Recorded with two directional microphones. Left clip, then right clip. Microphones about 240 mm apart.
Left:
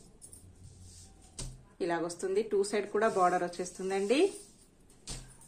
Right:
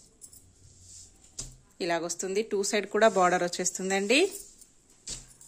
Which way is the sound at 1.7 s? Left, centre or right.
Right.